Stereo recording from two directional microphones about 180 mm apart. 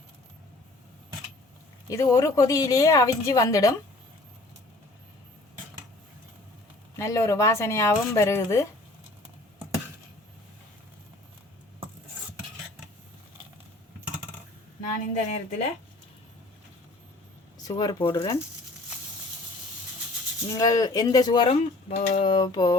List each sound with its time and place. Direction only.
1.9 s speech: 20° left (ahead or behind)
6.9 s speech: 15° left (ahead or behind)
15.3 s speech: 35° left (ahead or behind)
17.6 s speech: 20° left (ahead or behind)
20.5 s speech: 20° left (ahead or behind)
21.9 s speech: 40° left (ahead or behind)
22.2 s speech: 25° left (ahead or behind)